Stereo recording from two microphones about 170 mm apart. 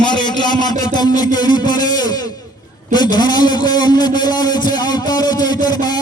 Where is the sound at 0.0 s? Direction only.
25° left (ahead or behind).